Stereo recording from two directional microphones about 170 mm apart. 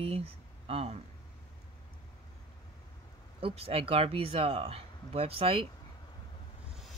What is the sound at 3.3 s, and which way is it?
Speech, 35° right (ahead or behind).